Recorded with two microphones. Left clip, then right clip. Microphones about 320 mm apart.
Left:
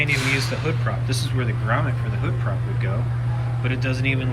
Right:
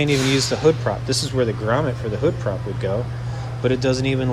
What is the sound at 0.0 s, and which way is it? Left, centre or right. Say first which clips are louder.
Speech: right 2 dB; centre.